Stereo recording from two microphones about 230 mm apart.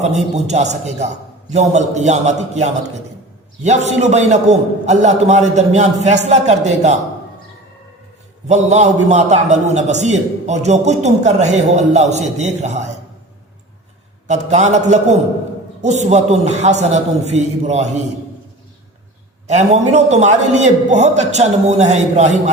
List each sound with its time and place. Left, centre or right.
0.3 s a man's voice: right
8.4 s a man's voice: right
14.3 s a man's voice: right
19.5 s a man's voice: right